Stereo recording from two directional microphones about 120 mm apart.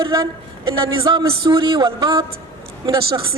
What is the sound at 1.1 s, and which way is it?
A woman's voice, 40° right (ahead or behind).